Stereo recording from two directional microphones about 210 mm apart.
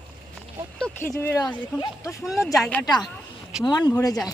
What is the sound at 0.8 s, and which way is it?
A woman's voice, 10° left (ahead or behind).